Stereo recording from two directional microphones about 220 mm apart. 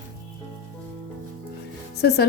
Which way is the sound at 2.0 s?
45° left (ahead or behind).